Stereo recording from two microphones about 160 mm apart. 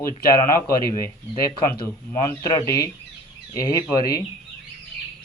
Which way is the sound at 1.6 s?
75° left (ahead or behind).